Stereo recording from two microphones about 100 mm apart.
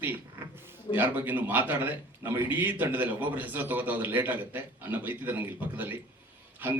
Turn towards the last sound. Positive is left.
turn(degrees=-20)  # may be behind; listen again after turning